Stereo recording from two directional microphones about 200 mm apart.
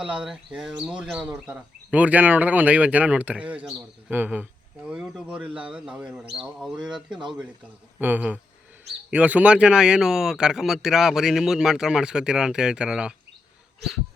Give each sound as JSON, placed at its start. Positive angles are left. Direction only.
{"t": 0.1, "sound": "speech", "side_deg": -5}
{"t": 7.1, "sound": "speech", "side_deg": -25}
{"t": 7.9, "sound": "speech", "side_deg": -10}